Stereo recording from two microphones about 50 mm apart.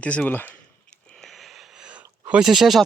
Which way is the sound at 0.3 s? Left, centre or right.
Left.